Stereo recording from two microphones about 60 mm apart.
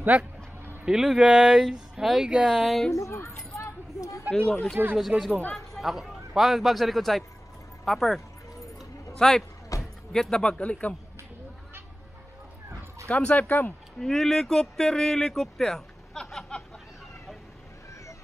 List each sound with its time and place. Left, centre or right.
0.8 s speech: centre
2.9 s speech: left
4.3 s speech: centre
4.9 s a man's voice: centre
8.7 s a sound: centre
9.7 s a sound: left
10.1 s speech: centre
10.6 s speech: left
13.1 s speech: left
13.9 s speech: centre